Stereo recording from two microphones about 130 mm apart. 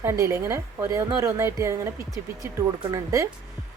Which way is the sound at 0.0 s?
20° right (ahead or behind).